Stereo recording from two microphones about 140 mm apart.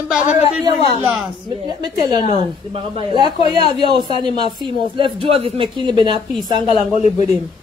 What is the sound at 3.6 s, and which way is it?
A man's voice, 35° right (ahead or behind).